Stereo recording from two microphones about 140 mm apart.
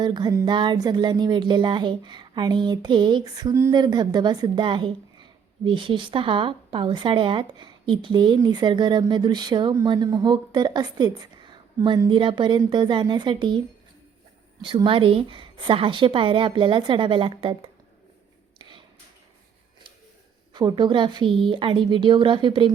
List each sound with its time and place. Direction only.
0.0 s a woman's voice: 30° right (ahead or behind)
14.6 s speech: 35° right (ahead or behind)
20.5 s speech: 35° right (ahead or behind)